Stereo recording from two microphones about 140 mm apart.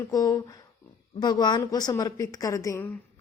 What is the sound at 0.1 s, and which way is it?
A woman's voice, 25° left (ahead or behind).